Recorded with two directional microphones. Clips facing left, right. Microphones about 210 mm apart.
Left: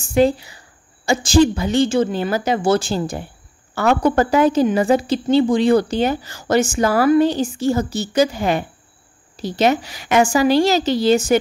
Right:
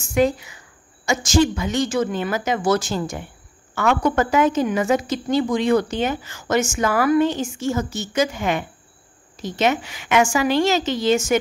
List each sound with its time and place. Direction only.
0.0 s a woman's voice: 30° left (ahead or behind)